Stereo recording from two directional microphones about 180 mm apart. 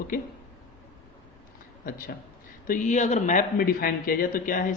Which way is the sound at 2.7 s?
40° left (ahead or behind).